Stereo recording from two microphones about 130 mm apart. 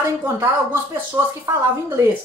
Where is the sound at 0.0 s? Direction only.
20° right (ahead or behind).